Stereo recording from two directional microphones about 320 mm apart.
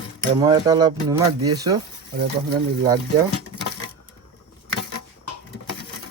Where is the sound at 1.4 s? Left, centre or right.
Right.